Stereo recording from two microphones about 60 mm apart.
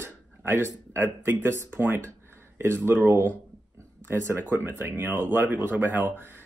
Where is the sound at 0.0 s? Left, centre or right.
Right.